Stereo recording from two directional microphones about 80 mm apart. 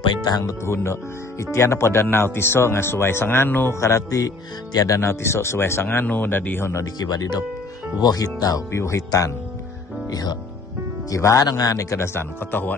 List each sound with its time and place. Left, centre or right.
0.2 s speech: left
0.5 s speech: left
3.8 s speech: left
6.8 s speech: left
8.7 s speech: left
10.0 s speech: left